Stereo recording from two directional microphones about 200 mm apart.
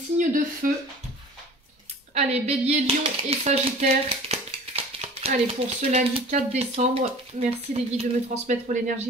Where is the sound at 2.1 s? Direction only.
30° right (ahead or behind).